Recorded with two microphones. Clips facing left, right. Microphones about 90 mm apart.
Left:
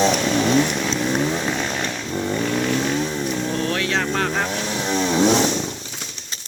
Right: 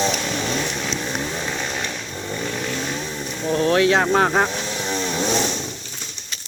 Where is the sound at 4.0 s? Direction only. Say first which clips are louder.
Right 5 dB; 25° right (ahead or behind).